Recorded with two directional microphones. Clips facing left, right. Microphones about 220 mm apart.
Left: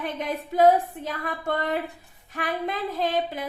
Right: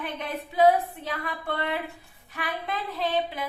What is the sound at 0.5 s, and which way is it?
Speech, 45° left (ahead or behind).